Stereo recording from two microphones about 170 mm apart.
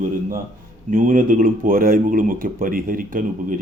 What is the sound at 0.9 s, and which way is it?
Speech, 50° right (ahead or behind).